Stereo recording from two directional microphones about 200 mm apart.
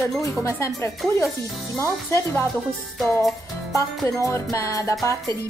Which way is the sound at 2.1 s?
15° left (ahead or behind).